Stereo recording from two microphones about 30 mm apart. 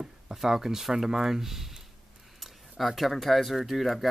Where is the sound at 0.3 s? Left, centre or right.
Centre.